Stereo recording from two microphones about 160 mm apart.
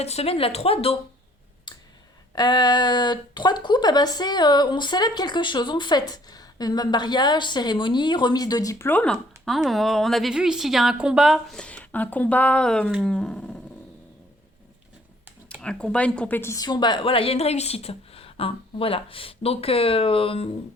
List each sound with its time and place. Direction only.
0.0 s a woman's voice: 40° left (ahead or behind)
1.7 s clicking: 30° left (ahead or behind)
2.3 s speech: 25° left (ahead or behind); by 9.1 s 10° left (ahead or behind)
9.5 s a woman's voice: centre (ahead or behind)
13.1 s roar: 5° left (ahead or behind)
15.6 s a woman's voice: 5° left (ahead or behind); by 20.5 s 35° left (ahead or behind)